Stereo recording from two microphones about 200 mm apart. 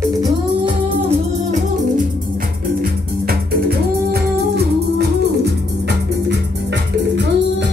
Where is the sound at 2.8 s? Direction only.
50° right (ahead or behind).